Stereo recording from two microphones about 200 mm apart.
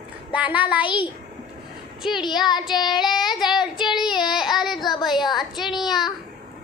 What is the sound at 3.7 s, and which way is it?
Child singing, 25° left (ahead or behind).